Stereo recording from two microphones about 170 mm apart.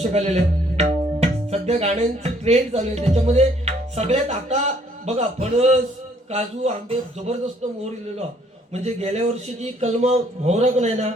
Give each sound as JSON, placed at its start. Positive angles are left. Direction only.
{"t": 0.0, "sound": "speech", "side_deg": -40}
{"t": 8.7, "sound": "speech", "side_deg": -40}